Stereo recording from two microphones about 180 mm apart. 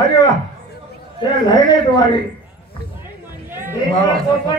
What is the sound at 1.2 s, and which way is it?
Speech, 25° left (ahead or behind).